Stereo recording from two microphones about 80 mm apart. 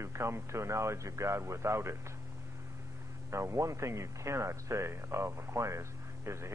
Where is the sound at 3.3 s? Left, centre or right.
Right.